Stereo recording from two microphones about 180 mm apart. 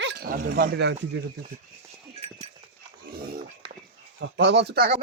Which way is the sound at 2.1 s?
30° right (ahead or behind).